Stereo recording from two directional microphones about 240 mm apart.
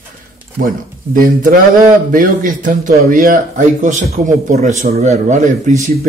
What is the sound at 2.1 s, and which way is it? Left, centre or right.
A man's voice, right.